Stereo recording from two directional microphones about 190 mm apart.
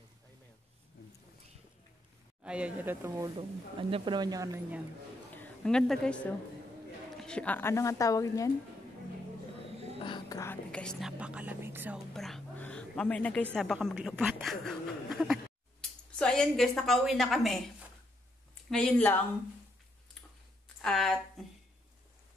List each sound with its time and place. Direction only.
2.4 s speech: 5° right (ahead or behind)
3.9 s speech: 25° right (ahead or behind)
5.3 s a woman's voice: 5° left (ahead or behind)
9.9 s whispering: 25° left (ahead or behind); by 12.0 s 10° right (ahead or behind)
12.1 s a woman's voice: centre (ahead or behind)
18.7 s speech: 5° left (ahead or behind)
20.6 s a sound: 5° left (ahead or behind)